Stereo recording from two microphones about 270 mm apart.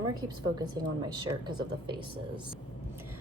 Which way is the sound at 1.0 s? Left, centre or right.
Centre.